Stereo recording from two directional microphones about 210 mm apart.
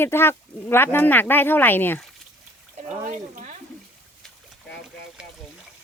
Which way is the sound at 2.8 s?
35° right (ahead or behind).